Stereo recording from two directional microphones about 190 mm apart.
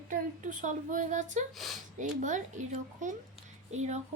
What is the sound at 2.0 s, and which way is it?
Speech, 40° right (ahead or behind).